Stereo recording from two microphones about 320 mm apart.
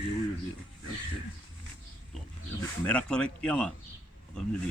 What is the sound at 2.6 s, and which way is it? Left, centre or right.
A man's voice, centre.